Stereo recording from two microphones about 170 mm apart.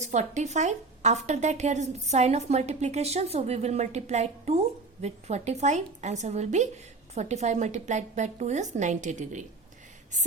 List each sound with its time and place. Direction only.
0.0 s a woman's voice: 45° right (ahead or behind)